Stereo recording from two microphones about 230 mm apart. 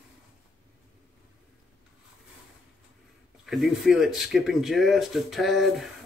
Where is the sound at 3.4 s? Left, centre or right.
Centre.